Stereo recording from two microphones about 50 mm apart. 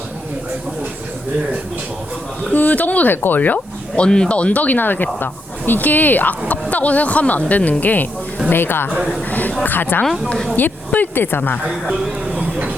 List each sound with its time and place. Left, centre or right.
2.5 s speech: left
3.9 s speech: centre
4.4 s speech: left
8.5 s a woman's voice: left
11.9 s speech: centre
12.4 s a sound: right